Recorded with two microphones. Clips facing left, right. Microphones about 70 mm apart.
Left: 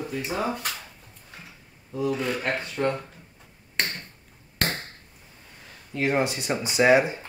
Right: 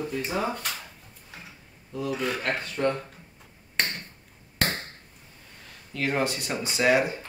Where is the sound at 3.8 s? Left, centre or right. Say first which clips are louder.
Even; centre.